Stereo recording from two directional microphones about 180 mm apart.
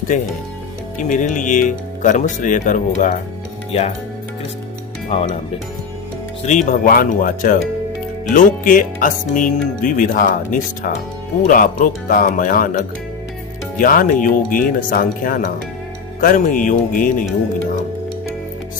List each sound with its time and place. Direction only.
0.1 s speech: 45° left (ahead or behind)
3.7 s speech: 35° left (ahead or behind)
5.1 s speech: 35° left (ahead or behind)
6.4 s speech: 40° left (ahead or behind)